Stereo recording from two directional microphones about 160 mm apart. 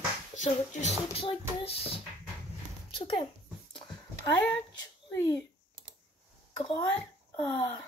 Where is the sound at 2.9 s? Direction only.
35° left (ahead or behind).